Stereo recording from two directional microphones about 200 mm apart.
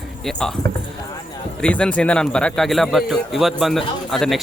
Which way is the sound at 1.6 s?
5° left (ahead or behind).